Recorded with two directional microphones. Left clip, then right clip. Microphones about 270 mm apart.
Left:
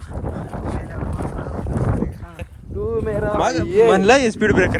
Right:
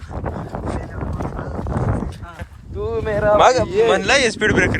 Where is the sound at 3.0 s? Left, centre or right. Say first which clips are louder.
Right 9 dB; right.